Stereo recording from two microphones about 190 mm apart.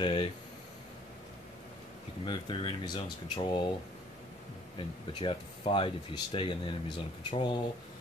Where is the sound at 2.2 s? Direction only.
25° left (ahead or behind).